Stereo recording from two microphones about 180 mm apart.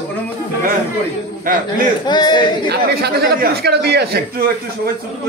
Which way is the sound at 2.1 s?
25° left (ahead or behind).